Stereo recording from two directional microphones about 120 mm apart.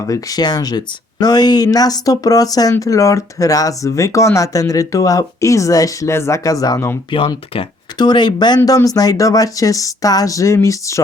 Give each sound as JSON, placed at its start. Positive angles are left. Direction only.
{"t": 0.1, "sound": "speech", "side_deg": 30}
{"t": 7.1, "sound": "speech", "side_deg": 45}
{"t": 7.9, "sound": "speech", "side_deg": 35}